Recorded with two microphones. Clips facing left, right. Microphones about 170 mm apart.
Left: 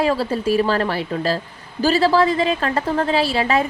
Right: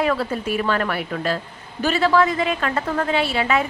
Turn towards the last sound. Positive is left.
turn(degrees=35)  # may be behind; listen again after turning